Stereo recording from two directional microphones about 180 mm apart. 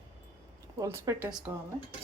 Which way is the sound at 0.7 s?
15° right (ahead or behind).